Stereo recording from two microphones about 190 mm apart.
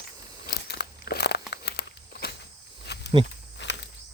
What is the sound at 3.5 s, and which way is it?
Walk, 70° left (ahead or behind).